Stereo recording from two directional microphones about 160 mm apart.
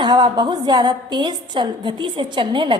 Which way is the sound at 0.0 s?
25° right (ahead or behind).